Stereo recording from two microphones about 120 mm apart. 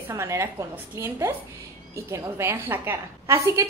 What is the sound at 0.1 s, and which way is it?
A woman's voice, 25° right (ahead or behind).